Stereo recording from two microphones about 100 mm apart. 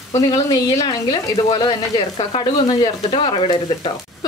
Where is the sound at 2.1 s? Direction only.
60° left (ahead or behind).